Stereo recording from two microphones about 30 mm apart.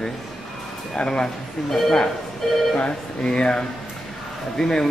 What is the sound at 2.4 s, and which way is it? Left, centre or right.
Speech, centre.